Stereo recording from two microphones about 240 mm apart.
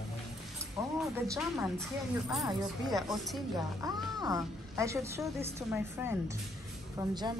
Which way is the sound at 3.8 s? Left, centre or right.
Centre.